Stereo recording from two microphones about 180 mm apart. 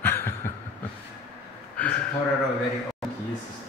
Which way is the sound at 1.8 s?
5° left (ahead or behind).